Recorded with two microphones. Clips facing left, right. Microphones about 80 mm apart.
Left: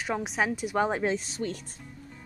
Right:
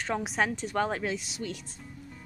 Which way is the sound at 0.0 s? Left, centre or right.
Centre.